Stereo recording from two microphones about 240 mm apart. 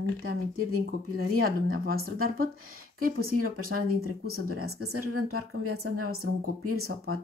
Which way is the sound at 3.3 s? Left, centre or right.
Right.